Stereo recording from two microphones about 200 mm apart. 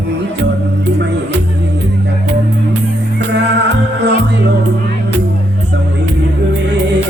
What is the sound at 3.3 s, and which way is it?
Music, 60° right (ahead or behind).